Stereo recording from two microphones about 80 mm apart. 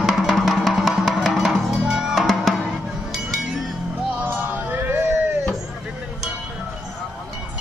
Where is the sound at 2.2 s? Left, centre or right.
Centre.